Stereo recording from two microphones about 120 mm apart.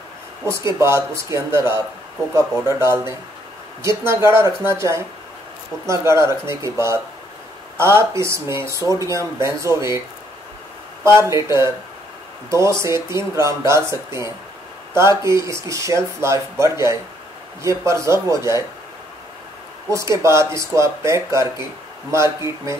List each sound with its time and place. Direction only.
0.5 s speech: 20° right (ahead or behind)
11.1 s speech: 25° right (ahead or behind)
19.9 s speech: 25° right (ahead or behind)